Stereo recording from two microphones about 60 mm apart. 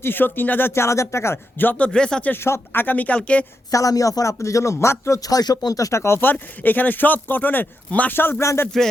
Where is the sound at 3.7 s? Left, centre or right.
Left.